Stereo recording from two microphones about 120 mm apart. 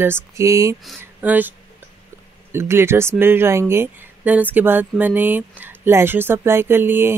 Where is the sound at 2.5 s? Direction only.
20° right (ahead or behind).